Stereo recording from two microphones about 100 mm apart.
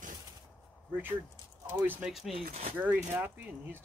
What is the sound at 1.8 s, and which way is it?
Speech, 10° right (ahead or behind).